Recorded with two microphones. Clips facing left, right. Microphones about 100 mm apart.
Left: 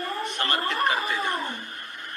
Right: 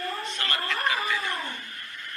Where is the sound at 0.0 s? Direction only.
20° left (ahead or behind).